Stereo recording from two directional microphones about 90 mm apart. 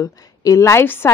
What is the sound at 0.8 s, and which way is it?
Speech, 25° left (ahead or behind).